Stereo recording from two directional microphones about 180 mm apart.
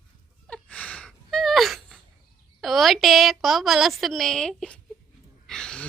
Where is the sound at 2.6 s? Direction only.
Centre (ahead or behind).